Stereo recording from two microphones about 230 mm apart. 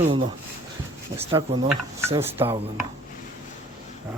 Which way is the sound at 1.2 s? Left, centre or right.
Right.